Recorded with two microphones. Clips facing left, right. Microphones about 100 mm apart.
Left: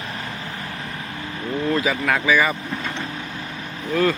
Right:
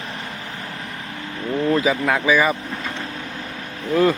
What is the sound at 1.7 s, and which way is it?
Speech, 20° right (ahead or behind).